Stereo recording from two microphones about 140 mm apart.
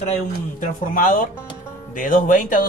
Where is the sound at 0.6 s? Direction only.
70° left (ahead or behind).